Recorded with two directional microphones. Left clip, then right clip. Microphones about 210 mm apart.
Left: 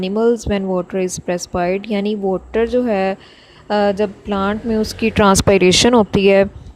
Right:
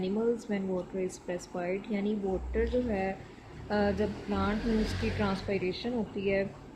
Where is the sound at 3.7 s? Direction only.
40° left (ahead or behind).